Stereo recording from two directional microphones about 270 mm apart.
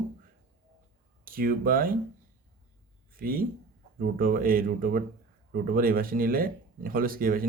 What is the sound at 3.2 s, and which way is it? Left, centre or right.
Speech, right.